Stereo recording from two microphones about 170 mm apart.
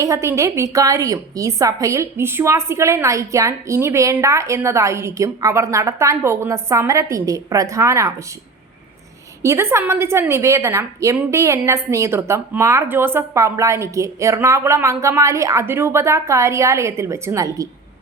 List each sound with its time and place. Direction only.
0.0 s a woman's voice: 15° right (ahead or behind)
9.4 s a woman's voice: 15° right (ahead or behind)